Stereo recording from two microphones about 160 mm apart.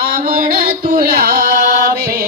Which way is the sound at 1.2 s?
65° right (ahead or behind).